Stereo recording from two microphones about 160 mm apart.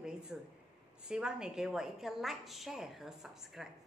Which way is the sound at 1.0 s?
5° right (ahead or behind).